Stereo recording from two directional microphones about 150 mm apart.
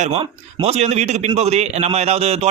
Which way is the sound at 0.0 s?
45° right (ahead or behind).